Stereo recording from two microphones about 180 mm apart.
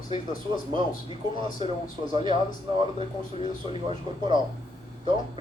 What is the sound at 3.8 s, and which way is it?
Speech, 25° right (ahead or behind).